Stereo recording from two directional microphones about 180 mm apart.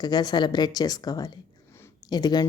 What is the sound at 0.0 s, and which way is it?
A woman's voice, 20° left (ahead or behind).